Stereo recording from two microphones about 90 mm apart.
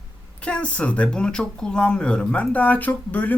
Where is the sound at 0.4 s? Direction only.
10° left (ahead or behind).